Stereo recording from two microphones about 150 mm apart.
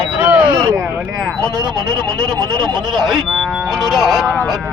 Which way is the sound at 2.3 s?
Centre (ahead or behind).